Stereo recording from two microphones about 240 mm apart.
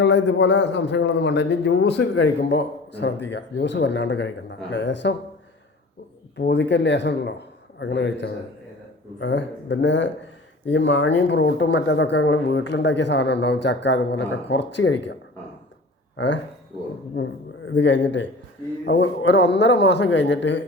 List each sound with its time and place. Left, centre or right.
0.0 s a man's voice: left
6.4 s a man's voice: left
16.1 s speech: left
17.7 s a man's voice: left